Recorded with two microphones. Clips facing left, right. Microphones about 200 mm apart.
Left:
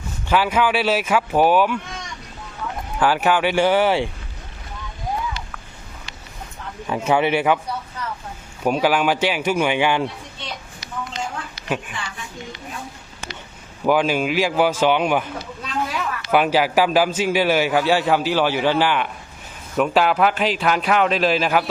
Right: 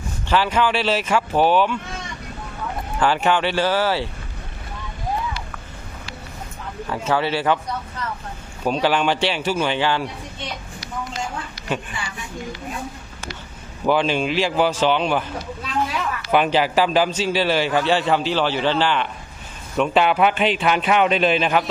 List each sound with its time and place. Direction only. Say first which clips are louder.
0.3 s a man's voice: left 1 dB; 10° left (ahead or behind)
3.0 s a man's voice: left 1 dB; 10° left (ahead or behind)
6.8 s a man's voice: left 3 dB; 15° left (ahead or behind)
13.8 s a man's voice: left 1 dB; 10° left (ahead or behind)
15.6 s a sound: right 1 dB; centre (ahead or behind)
16.3 s a man's voice: left 1 dB; 10° left (ahead or behind)